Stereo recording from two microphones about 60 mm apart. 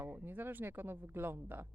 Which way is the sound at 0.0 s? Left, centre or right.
Right.